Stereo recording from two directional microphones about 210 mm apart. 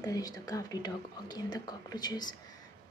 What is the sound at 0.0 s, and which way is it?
A woman's voice, 15° left (ahead or behind).